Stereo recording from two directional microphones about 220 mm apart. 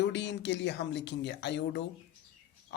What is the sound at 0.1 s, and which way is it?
Speech, 55° left (ahead or behind).